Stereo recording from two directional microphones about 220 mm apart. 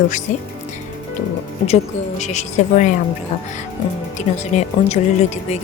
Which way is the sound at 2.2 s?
30° left (ahead or behind).